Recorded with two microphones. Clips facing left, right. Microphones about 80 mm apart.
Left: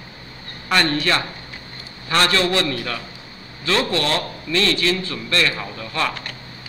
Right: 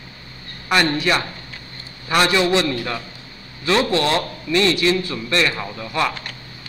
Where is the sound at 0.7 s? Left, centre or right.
Centre.